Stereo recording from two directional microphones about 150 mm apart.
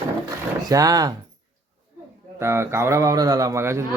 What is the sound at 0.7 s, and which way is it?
Speech, 25° right (ahead or behind).